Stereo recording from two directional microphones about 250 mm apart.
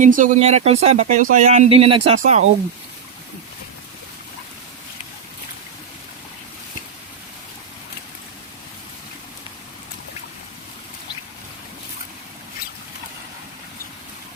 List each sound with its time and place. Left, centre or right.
0.0 s speech: right